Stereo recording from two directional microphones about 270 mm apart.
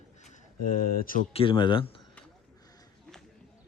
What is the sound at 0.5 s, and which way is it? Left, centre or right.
Speech, left.